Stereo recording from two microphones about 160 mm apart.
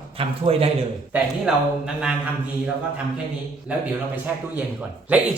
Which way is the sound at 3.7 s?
10° right (ahead or behind).